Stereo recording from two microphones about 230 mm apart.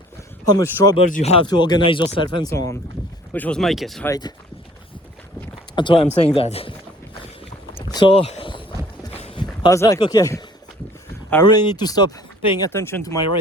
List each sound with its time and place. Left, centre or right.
0.4 s speech: centre
1.1 s speech: left; by 4.1 s centre
5.7 s speech: left
7.9 s speech: left
9.1 s a sound: left
11.3 s speech: centre